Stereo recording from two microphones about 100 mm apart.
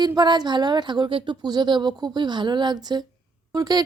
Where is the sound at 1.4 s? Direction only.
45° right (ahead or behind).